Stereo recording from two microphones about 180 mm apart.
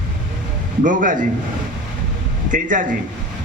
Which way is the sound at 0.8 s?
50° right (ahead or behind).